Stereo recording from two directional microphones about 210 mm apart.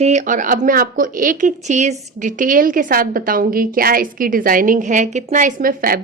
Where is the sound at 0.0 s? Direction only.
35° right (ahead or behind).